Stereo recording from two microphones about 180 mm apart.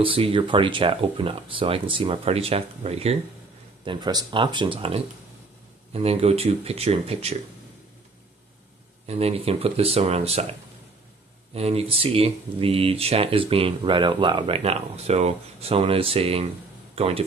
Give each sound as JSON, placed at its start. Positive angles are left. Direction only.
{"t": 0.0, "sound": "speech", "side_deg": -30}
{"t": 9.0, "sound": "speech", "side_deg": -35}
{"t": 11.5, "sound": "speech", "side_deg": -35}